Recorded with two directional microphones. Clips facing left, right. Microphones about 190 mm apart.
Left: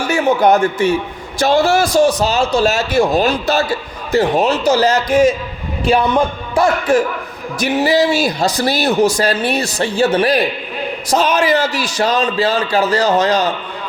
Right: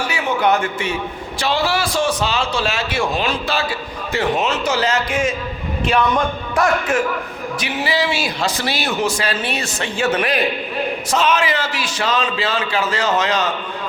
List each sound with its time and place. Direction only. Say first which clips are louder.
0.1 s a man's voice: left 7 dB; 45° left (ahead or behind)
7.6 s a man's voice: left 8 dB; 45° left (ahead or behind)